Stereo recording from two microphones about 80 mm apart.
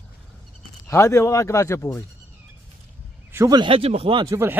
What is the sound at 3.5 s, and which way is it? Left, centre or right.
Speech, right.